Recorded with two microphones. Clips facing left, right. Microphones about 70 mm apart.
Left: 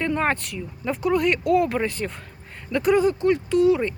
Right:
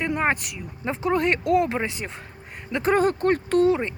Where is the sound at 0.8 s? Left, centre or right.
Right.